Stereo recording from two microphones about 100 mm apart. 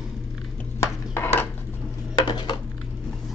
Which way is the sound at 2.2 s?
45° left (ahead or behind).